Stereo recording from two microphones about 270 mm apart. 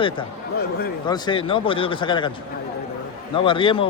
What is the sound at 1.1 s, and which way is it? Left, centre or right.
A man's voice, centre.